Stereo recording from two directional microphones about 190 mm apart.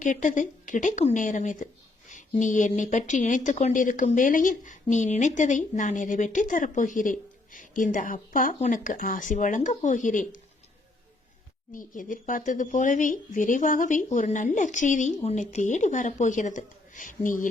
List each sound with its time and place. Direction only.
0.0 s speech: 40° left (ahead or behind)
11.7 s speech: 45° left (ahead or behind)